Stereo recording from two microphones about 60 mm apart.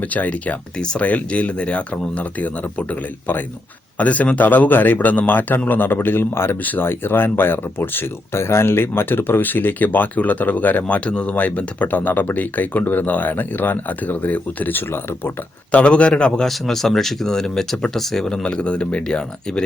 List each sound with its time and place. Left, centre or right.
0.1 s speech: left
3.9 s a man's voice: left
15.7 s speech: left
16.5 s speech: centre
18.3 s speech: centre